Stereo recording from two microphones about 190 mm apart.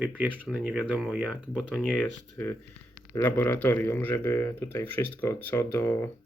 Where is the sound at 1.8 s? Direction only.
5° left (ahead or behind).